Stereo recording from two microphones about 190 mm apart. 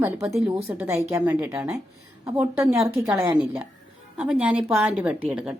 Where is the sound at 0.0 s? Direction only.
10° right (ahead or behind).